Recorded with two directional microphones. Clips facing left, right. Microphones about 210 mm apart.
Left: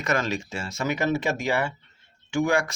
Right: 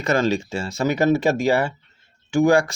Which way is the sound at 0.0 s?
30° right (ahead or behind).